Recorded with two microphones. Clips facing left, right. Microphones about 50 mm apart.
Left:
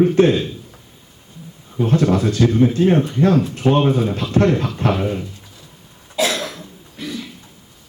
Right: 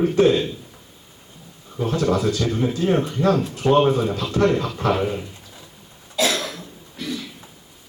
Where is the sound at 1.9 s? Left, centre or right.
Left.